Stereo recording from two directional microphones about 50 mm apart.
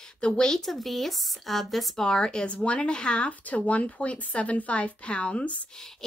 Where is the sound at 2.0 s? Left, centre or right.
Centre.